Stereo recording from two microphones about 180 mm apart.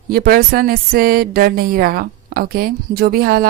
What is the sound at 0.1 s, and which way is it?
A woman's voice, 55° right (ahead or behind).